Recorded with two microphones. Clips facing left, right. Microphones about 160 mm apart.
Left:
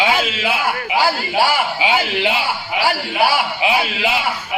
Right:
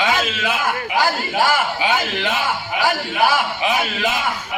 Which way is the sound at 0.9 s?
10° left (ahead or behind).